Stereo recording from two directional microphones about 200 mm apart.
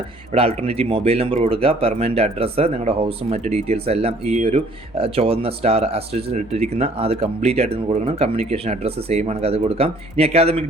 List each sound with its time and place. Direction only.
0.3 s speech: 30° right (ahead or behind)